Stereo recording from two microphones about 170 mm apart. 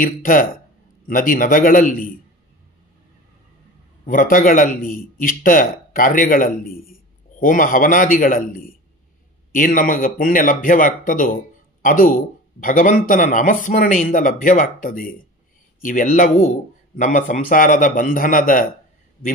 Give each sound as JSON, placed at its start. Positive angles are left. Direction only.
{"t": 0.0, "sound": "a man's voice", "side_deg": 55}
{"t": 4.0, "sound": "a man's voice", "side_deg": 55}